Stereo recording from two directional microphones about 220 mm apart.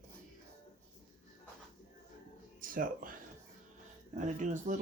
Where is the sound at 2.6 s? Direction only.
40° right (ahead or behind).